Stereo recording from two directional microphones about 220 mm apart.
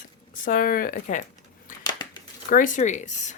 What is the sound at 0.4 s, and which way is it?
Speech, 40° left (ahead or behind).